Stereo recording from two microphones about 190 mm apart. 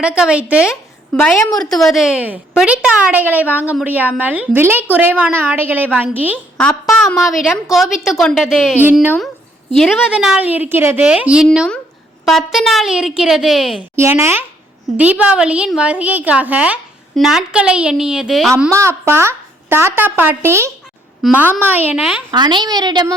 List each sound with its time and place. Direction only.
0.0 s a woman's voice: 5° right (ahead or behind)
6.6 s a woman's voice: 5° left (ahead or behind)
9.7 s a woman's voice: centre (ahead or behind)
13.9 s a woman's voice: 15° right (ahead or behind)
18.5 s speech: 15° right (ahead or behind)
21.2 s a woman's voice: centre (ahead or behind)
22.3 s a woman's voice: 25° right (ahead or behind)